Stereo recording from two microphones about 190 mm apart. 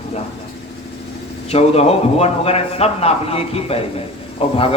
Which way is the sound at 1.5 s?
30° left (ahead or behind).